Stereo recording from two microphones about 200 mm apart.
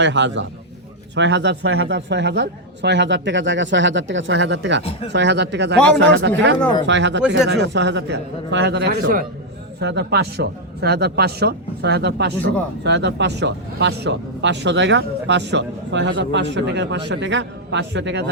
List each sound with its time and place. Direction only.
0.0 s speech: 65° right (ahead or behind)